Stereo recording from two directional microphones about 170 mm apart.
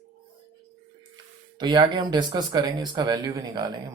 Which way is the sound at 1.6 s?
25° right (ahead or behind).